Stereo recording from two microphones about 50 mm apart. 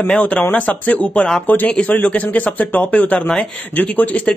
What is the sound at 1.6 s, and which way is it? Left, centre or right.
Speech, left.